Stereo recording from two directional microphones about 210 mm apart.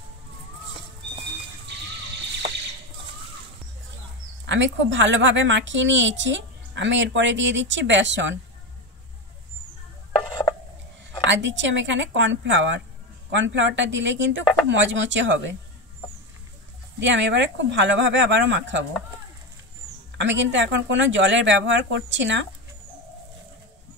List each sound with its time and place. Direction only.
4.5 s a woman's voice: 60° right (ahead or behind)
11.2 s a woman's voice: 60° right (ahead or behind)
17.0 s a woman's voice: 60° right (ahead or behind)
20.2 s a woman's voice: 60° right (ahead or behind)